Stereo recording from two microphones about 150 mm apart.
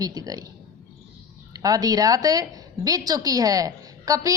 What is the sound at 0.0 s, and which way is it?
Speech, 25° right (ahead or behind).